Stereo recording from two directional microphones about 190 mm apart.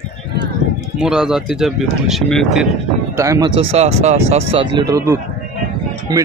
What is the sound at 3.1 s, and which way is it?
A man's voice, 15° right (ahead or behind).